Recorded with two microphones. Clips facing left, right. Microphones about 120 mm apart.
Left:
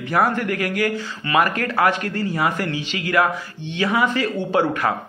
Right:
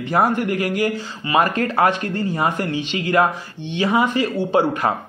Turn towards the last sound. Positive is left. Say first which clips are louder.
# right 2 dB
turn(degrees=-15)  # may be behind; listen again after turning